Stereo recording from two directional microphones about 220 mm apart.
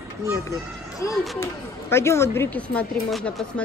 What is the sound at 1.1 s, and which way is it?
Speech, centre (ahead or behind).